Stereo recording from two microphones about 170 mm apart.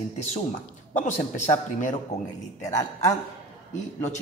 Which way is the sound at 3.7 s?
45° left (ahead or behind).